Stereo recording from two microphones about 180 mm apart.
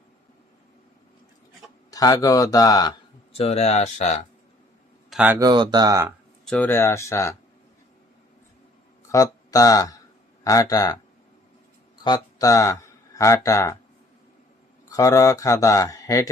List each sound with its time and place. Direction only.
1.9 s speech: 20° left (ahead or behind)
3.3 s speech: 35° left (ahead or behind)
5.1 s speech: 10° right (ahead or behind)
5.4 s speech: 25° right (ahead or behind)
6.4 s speech: 5° left (ahead or behind)
9.1 s speech: 20° left (ahead or behind)
12.0 s speech: 20° left (ahead or behind)
14.8 s speech: 20° left (ahead or behind)